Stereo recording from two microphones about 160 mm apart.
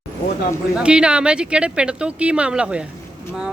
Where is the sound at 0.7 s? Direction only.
5° right (ahead or behind).